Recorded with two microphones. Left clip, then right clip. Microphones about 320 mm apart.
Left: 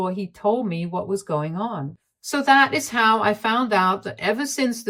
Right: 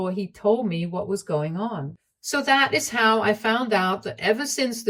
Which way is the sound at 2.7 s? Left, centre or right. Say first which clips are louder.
Left 1 dB; left.